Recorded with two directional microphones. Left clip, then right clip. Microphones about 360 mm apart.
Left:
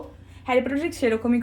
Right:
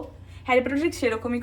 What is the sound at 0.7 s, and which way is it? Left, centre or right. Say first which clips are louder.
Speech: left 1 dB; centre.